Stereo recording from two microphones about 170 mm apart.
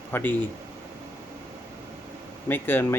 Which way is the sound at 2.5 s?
10° left (ahead or behind).